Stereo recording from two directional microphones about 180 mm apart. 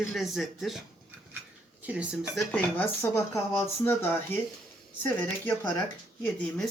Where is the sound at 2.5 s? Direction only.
10° left (ahead or behind).